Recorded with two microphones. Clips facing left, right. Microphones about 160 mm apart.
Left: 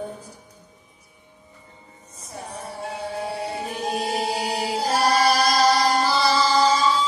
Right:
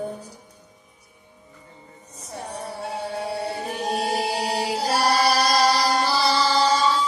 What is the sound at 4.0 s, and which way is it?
Chant, 35° right (ahead or behind).